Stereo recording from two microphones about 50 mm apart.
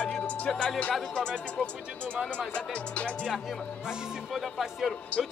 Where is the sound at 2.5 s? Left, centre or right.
Left.